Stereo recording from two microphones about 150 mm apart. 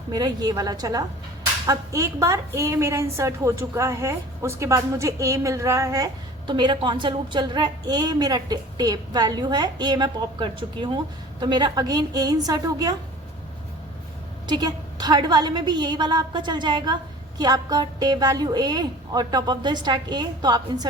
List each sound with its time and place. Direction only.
0.1 s a woman's voice: 25° right (ahead or behind)
6.5 s a woman's voice: 30° right (ahead or behind)
14.4 s a woman's voice: 30° right (ahead or behind)